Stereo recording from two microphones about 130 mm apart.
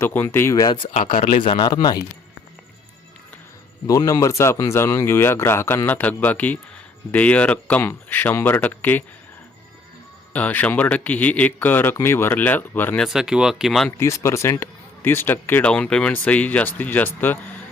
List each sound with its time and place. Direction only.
0.0 s speech: 15° left (ahead or behind)
1.1 s a man's voice: 80° left
1.5 s speech: 35° left (ahead or behind)
3.8 s speech: 25° left (ahead or behind)
10.3 s speech: 10° left (ahead or behind)
13.0 s speech: 5° right (ahead or behind)
14.0 s speech: 20° left (ahead or behind)